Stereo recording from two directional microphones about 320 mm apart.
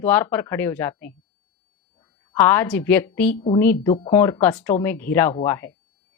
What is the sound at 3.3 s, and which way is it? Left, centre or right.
Speech, centre.